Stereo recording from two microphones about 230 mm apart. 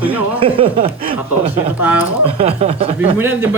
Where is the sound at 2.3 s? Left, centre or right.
Right.